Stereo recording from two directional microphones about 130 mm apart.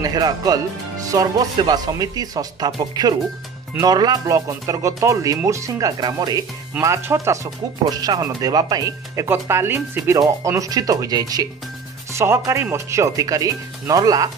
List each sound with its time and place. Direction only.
0.0 s speech: 30° right (ahead or behind)